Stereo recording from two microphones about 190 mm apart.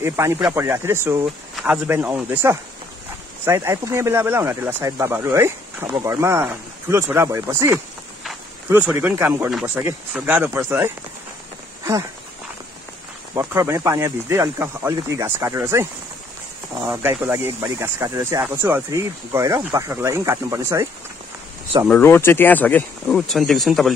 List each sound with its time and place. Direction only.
0.0 s speech: 15° right (ahead or behind)
9.5 s speech: centre (ahead or behind)
13.3 s speech: 15° right (ahead or behind)
21.8 s speech: 10° left (ahead or behind)